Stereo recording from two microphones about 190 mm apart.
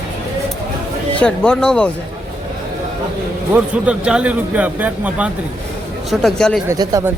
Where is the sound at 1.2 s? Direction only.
5° left (ahead or behind).